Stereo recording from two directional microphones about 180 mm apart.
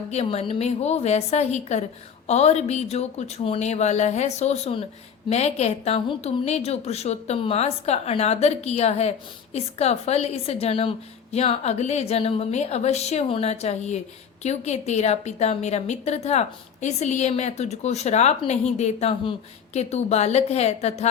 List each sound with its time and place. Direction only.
0.1 s a woman's voice: 35° left (ahead or behind)